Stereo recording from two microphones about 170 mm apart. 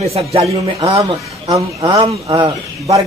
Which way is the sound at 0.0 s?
35° right (ahead or behind).